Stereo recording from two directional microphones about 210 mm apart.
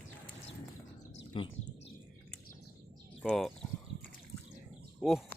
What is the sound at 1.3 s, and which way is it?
Speech, 25° left (ahead or behind).